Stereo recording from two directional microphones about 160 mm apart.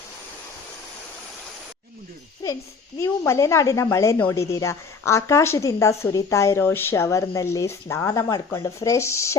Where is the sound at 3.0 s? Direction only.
20° left (ahead or behind).